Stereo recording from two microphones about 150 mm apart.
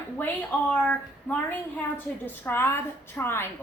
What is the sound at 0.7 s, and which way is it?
A woman's voice, 10° left (ahead or behind).